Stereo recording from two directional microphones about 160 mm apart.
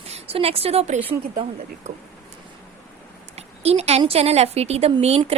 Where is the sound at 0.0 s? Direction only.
40° right (ahead or behind).